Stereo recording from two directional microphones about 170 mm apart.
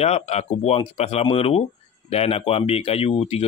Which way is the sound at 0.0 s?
40° left (ahead or behind).